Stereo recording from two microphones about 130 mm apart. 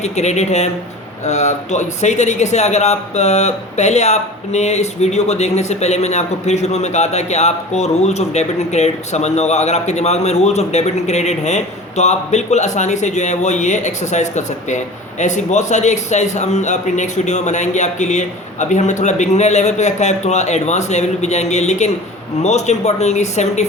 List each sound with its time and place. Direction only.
0.0 s speech: 60° left (ahead or behind)